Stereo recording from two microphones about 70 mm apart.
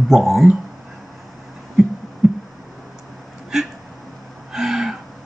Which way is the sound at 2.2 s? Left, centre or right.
Centre.